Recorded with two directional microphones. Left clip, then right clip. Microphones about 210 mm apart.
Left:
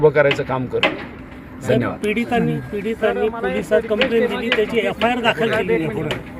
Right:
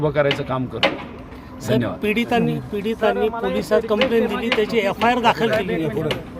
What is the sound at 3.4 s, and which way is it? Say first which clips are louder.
Speech: left 1 dB; 55° right (ahead or behind).